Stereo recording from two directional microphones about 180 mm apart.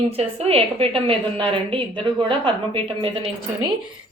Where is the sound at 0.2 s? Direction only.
35° right (ahead or behind).